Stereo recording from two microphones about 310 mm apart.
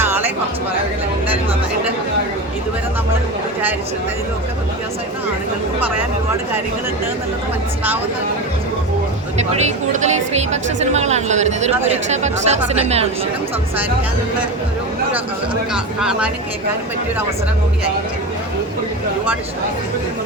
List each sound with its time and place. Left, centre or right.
0.0 s music: centre
9.9 s speech: right
15.7 s speech: centre